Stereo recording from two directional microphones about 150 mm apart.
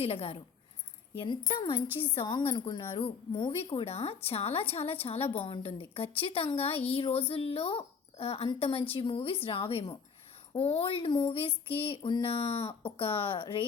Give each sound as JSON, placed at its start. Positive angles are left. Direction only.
{"t": 0.0, "sound": "speech", "side_deg": 40}